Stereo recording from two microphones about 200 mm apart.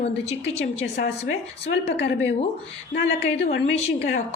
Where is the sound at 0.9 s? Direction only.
60° left (ahead or behind).